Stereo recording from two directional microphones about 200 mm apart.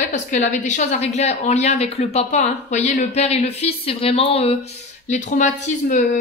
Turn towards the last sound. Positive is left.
turn(degrees=40)  # may be behind; listen again after turning